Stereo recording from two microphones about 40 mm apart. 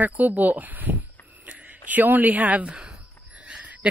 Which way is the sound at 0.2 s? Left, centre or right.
Right.